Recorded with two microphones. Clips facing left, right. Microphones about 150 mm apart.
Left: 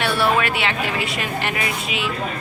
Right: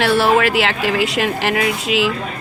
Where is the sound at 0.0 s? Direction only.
90° right.